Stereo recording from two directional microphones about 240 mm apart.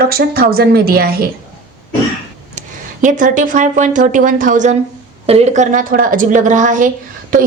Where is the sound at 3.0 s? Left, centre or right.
Right.